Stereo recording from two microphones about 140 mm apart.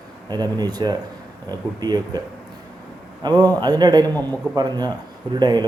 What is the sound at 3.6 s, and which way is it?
Speech, 30° right (ahead or behind).